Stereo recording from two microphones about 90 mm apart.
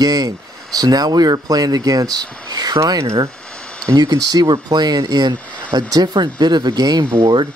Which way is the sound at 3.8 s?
50° right (ahead or behind).